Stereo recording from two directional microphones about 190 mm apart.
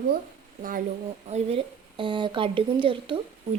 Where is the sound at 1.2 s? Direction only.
35° right (ahead or behind).